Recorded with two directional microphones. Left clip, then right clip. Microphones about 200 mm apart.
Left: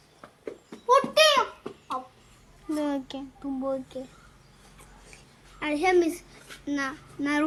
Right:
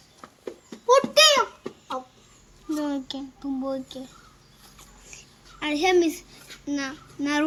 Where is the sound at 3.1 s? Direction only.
15° left (ahead or behind).